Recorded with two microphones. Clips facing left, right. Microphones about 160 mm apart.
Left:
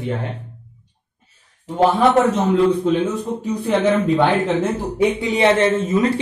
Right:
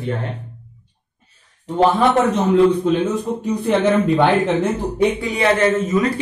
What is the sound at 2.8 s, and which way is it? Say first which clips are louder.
Speech: right 1 dB; centre (ahead or behind).